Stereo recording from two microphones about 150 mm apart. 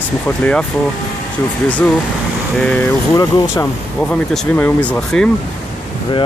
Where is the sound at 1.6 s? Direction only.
10° left (ahead or behind).